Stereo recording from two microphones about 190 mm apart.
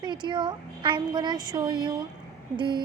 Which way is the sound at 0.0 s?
25° right (ahead or behind).